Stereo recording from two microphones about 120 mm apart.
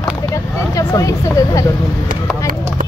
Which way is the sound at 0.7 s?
30° left (ahead or behind).